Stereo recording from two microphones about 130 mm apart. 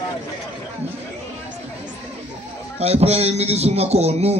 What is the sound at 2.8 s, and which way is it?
A man's voice, 55° right (ahead or behind).